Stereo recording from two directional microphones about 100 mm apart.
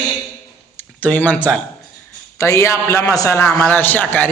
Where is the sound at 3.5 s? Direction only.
20° left (ahead or behind).